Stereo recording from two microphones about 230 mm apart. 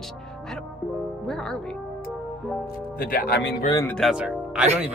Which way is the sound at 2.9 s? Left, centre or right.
Left.